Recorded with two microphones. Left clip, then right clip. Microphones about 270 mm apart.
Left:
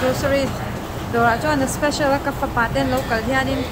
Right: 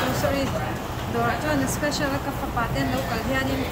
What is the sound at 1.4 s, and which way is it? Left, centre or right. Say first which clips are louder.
Speech: left 5 dB; centre.